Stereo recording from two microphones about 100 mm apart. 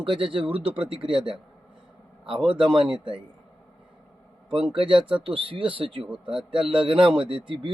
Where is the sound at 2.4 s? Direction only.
55° right (ahead or behind).